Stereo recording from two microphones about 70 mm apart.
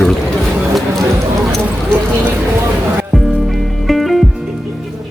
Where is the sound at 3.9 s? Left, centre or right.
Centre.